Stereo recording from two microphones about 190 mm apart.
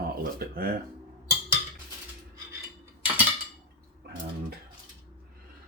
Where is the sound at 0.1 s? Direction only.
50° right (ahead or behind).